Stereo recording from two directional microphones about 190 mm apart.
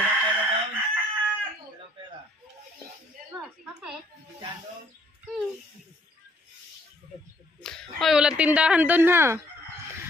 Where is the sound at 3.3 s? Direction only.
5° right (ahead or behind).